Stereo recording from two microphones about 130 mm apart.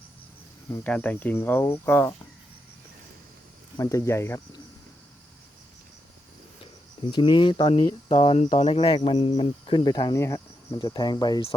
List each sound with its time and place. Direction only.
0.7 s speech: 10° left (ahead or behind)
3.8 s speech: 25° left (ahead or behind)
7.1 s speech: 35° left (ahead or behind)
8.4 s speech: 55° left (ahead or behind); by 10.2 s 35° left (ahead or behind)
10.2 s cricket: 20° left (ahead or behind)
10.8 s speech: 35° left (ahead or behind)